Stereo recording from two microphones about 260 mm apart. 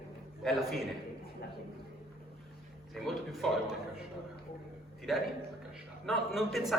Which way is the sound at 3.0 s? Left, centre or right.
Centre.